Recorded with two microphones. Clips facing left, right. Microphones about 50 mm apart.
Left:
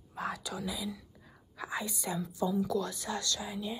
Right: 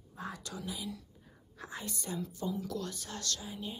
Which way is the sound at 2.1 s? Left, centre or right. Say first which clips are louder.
Left 3 dB; left.